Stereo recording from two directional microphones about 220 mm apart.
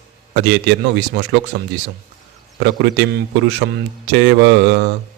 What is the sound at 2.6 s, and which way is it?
Speech, 55° right (ahead or behind).